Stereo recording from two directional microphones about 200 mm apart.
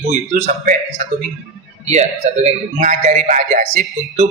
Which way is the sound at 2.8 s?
35° right (ahead or behind).